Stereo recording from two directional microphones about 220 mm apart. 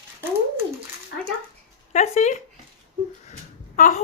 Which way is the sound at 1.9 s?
30° left (ahead or behind).